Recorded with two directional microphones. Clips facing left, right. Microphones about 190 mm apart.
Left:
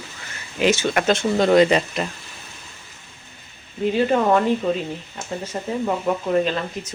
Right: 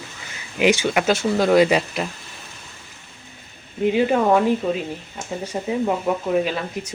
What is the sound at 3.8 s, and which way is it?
Speech, 15° right (ahead or behind).